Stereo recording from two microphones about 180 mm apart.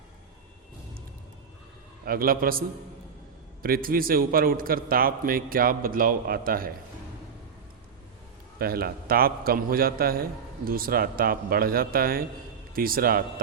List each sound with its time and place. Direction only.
2.0 s a man's voice: 55° right (ahead or behind)
8.5 s a man's voice: 55° right (ahead or behind)